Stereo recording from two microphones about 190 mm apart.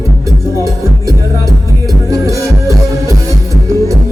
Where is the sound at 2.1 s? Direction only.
15° right (ahead or behind).